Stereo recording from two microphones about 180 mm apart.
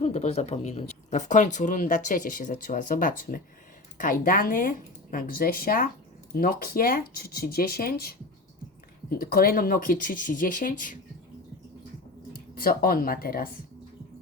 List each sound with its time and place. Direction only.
0.0 s speech: 35° left (ahead or behind)
12.3 s speech: 55° left (ahead or behind)